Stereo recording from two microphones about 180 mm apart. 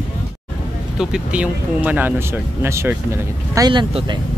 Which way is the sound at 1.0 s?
5° right (ahead or behind).